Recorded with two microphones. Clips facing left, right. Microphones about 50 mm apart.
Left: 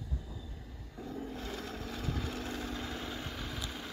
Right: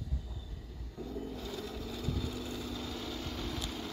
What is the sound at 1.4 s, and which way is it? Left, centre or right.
Vehicle, left.